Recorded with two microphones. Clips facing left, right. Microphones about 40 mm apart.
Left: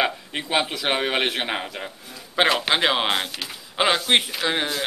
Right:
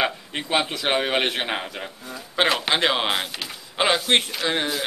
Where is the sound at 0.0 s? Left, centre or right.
Centre.